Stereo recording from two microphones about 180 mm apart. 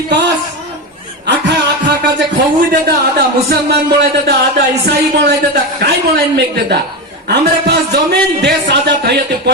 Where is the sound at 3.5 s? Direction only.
65° right (ahead or behind).